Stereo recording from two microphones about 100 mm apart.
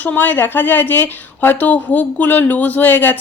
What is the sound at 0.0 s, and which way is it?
A woman's voice, 15° left (ahead or behind).